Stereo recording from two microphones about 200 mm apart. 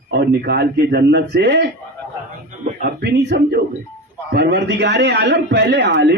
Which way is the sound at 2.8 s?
55° right (ahead or behind).